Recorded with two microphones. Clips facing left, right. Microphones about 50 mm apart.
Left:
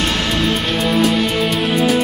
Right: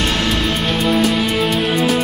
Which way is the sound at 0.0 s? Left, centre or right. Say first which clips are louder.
Even; centre.